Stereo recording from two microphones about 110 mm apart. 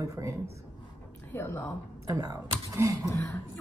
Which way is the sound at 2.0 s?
30° right (ahead or behind).